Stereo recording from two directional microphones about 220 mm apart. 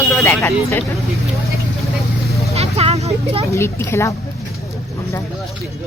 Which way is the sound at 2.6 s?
30° right (ahead or behind).